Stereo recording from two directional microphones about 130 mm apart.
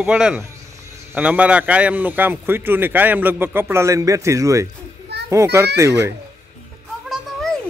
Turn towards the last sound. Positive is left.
turn(degrees=5)  # may be behind; listen again after turning